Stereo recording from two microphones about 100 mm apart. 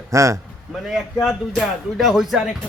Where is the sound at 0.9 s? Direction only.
Centre (ahead or behind).